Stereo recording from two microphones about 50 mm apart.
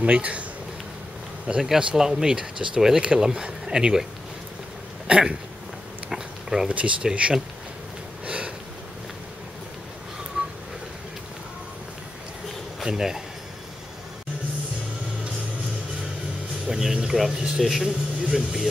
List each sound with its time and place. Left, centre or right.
0.0 s speech: right
1.6 s speech: centre
5.0 s speech: centre
6.0 s a sound: centre
6.7 s speech: right
8.3 s sniff: right
10.4 s a sound: right
12.8 s speech: centre
16.6 s speech: centre